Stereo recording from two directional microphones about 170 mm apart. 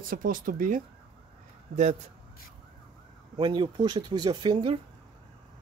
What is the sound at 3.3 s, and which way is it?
Speech, 25° right (ahead or behind).